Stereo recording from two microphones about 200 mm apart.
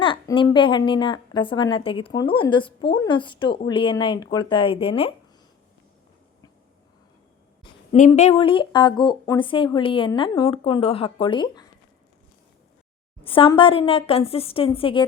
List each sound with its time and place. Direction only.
0.0 s a sound: 25° left (ahead or behind)
0.5 s speech: 25° left (ahead or behind)
7.9 s speech: 35° left (ahead or behind)
13.2 s speech: 25° left (ahead or behind)